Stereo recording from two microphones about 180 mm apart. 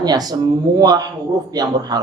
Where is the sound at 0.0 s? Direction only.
20° right (ahead or behind).